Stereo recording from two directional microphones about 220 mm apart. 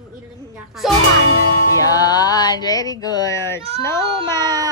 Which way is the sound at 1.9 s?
15° left (ahead or behind).